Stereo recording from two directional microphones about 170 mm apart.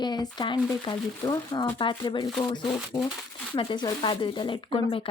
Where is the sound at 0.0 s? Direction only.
25° left (ahead or behind).